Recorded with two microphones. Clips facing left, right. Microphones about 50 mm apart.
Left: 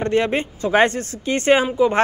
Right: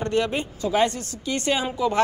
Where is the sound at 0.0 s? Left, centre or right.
Left.